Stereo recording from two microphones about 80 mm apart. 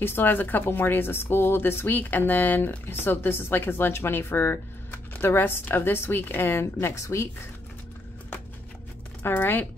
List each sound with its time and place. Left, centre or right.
0.0 s speech: left
9.2 s speech: left